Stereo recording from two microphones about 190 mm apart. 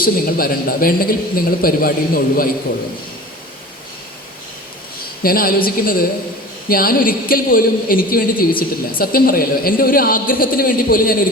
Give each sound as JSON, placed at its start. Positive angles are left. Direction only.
{"t": 0.0, "sound": "a man's voice", "side_deg": 50}
{"t": 5.2, "sound": "a man's voice", "side_deg": 50}